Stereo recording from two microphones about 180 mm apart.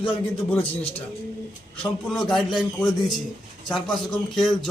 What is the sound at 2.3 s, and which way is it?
A man's voice, centre (ahead or behind).